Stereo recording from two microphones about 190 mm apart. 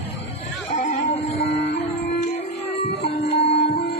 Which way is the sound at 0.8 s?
35° left (ahead or behind).